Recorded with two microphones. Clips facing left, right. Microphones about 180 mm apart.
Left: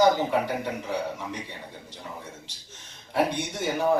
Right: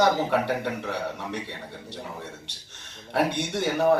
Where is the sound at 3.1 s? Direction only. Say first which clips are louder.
Right 1 dB; 70° right (ahead or behind).